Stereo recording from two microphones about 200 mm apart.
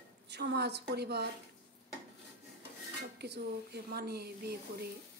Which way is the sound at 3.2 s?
55° right (ahead or behind).